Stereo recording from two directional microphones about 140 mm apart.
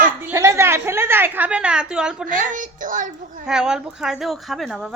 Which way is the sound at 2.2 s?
70° right (ahead or behind).